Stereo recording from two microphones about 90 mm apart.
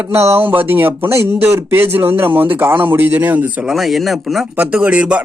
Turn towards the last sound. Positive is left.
turn(degrees=-15)  # may be behind; listen again after turning